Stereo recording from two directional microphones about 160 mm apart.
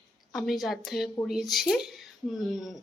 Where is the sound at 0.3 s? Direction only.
Centre (ahead or behind).